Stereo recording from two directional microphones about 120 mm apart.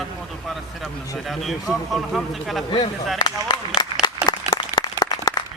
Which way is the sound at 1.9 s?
Centre (ahead or behind).